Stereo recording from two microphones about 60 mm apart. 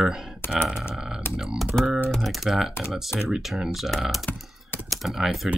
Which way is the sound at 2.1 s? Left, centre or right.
Centre.